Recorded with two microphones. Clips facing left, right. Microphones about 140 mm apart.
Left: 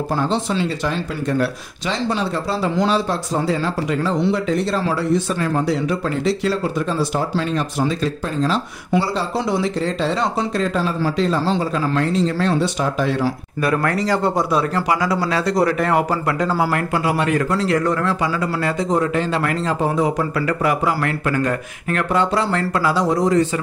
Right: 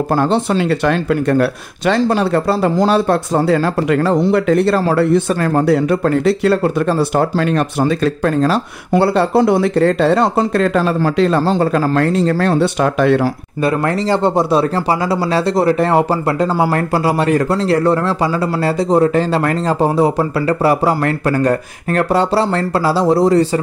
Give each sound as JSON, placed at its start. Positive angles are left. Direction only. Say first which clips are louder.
{"t": 0.1, "sound": "speech", "louder": "right 6 dB", "side_deg": -55}
{"t": 13.6, "sound": "speech", "louder": "right 4 dB", "side_deg": -25}